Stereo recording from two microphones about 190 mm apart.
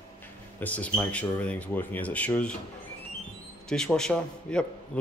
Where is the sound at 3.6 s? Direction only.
5° left (ahead or behind).